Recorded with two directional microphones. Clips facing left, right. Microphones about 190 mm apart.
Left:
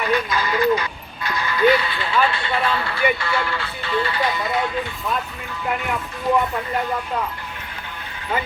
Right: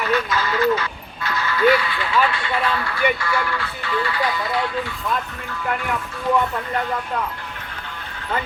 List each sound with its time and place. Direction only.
0.0 s speech: 15° left (ahead or behind)